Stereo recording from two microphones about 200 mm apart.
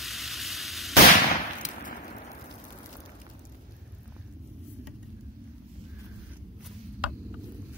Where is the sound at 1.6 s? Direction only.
40° left (ahead or behind).